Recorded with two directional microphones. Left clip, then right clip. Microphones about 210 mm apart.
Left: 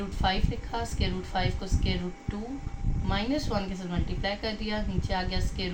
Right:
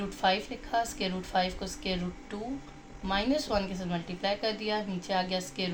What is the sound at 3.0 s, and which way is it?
A woman's voice, 50° right (ahead or behind).